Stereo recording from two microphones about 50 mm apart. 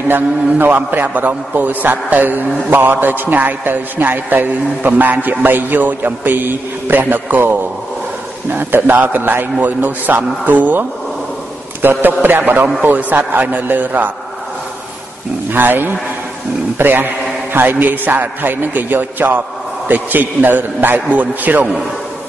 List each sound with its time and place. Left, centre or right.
0.1 s a man's voice: right
15.5 s a man's voice: right